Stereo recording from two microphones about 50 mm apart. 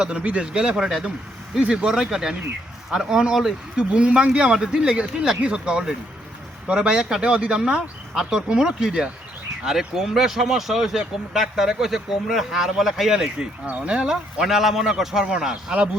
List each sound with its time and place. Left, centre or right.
0.0 s speech: right
4.5 s speech: centre
13.7 s speech: right
14.0 s speech: centre